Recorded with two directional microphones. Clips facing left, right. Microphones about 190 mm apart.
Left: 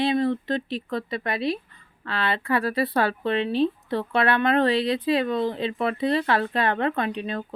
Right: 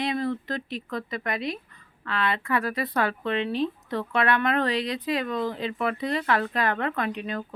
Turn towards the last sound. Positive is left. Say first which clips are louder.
# left 2 dB
turn(degrees=30)  # may be behind; listen again after turning